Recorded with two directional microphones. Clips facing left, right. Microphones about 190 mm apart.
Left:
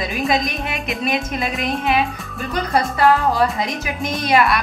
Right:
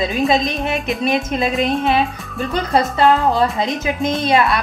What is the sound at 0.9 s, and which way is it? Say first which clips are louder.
Music: right 3 dB; centre (ahead or behind).